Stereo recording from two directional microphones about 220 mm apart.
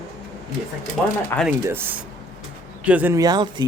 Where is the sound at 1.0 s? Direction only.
Centre (ahead or behind).